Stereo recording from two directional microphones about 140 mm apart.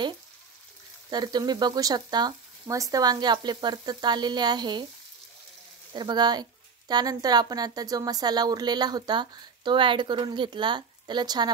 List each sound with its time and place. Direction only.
1.1 s a woman's voice: 30° right (ahead or behind)
5.9 s a woman's voice: 30° right (ahead or behind)